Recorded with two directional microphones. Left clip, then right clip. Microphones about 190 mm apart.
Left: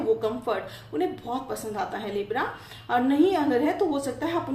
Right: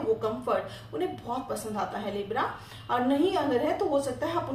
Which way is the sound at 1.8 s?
40° left (ahead or behind).